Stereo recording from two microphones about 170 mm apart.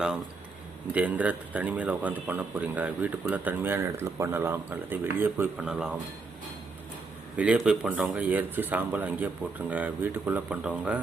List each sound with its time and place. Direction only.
0.9 s speech: 10° right (ahead or behind)
7.3 s speech: 5° right (ahead or behind)